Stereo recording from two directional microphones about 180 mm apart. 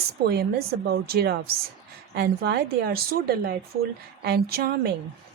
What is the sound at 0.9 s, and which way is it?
A woman's voice, 60° right (ahead or behind).